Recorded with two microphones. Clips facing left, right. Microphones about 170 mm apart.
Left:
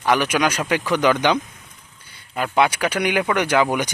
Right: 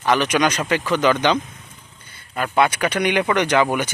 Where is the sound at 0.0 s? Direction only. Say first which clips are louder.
Right 1 dB; 10° left (ahead or behind).